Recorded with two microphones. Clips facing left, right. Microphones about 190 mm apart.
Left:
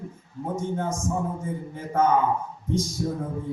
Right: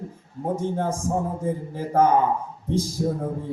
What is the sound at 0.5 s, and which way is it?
A man's voice, 30° right (ahead or behind).